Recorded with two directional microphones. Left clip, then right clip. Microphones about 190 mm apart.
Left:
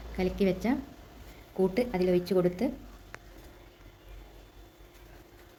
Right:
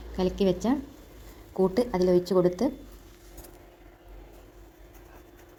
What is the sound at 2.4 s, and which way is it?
Speech, 5° left (ahead or behind).